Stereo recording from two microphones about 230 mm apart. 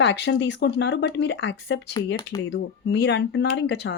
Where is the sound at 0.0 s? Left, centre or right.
Left.